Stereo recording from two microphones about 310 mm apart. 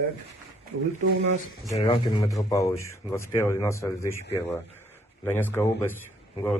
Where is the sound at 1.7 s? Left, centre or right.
Centre.